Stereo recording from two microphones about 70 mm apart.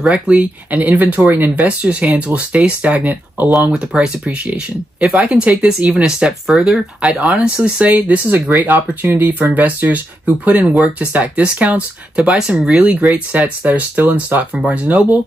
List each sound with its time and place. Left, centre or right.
0.1 s speech: centre
5.3 s speech: centre